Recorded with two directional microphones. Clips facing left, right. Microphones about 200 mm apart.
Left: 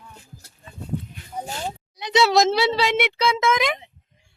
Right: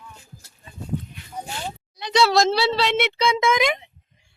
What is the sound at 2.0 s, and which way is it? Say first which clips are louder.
A child's voice: left 1 dB; 20° left (ahead or behind).